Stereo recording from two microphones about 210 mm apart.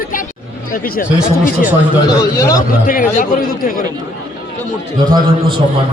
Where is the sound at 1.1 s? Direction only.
5° right (ahead or behind).